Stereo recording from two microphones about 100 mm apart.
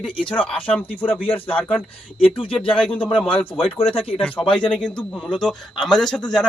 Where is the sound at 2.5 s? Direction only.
10° left (ahead or behind).